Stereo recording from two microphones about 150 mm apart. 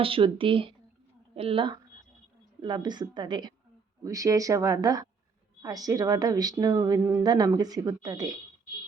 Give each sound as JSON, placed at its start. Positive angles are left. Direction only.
{"t": 0.0, "sound": "a woman's voice", "side_deg": -35}